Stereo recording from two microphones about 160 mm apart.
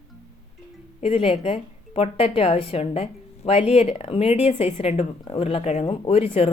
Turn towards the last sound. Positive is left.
turn(degrees=40)  # may be behind; listen again after turning